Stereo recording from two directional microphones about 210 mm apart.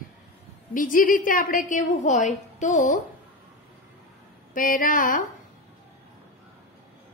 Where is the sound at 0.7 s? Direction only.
40° left (ahead or behind).